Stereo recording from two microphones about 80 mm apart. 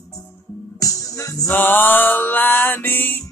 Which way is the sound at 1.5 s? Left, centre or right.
Left.